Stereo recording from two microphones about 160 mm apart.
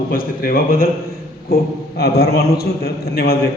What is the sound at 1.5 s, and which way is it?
A man's voice, 80° left.